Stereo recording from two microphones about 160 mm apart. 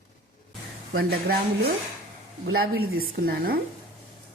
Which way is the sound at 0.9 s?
70° right (ahead or behind).